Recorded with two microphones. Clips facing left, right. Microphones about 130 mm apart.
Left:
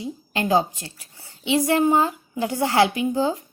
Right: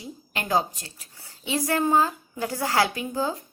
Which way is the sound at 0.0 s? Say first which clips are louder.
Left 8 dB; 25° left (ahead or behind).